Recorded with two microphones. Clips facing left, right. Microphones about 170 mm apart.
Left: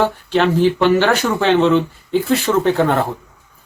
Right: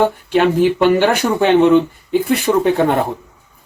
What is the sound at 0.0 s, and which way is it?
Speech, 15° right (ahead or behind).